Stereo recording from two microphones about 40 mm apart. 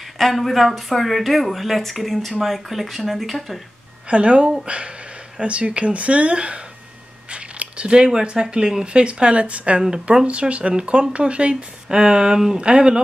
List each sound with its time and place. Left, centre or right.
0.2 s speech: centre
4.1 s speech: right
11.9 s speech: centre